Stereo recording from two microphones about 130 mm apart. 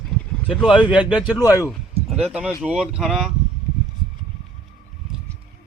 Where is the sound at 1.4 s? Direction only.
25° left (ahead or behind).